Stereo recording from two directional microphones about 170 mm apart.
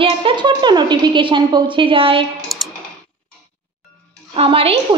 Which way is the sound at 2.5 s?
Centre (ahead or behind).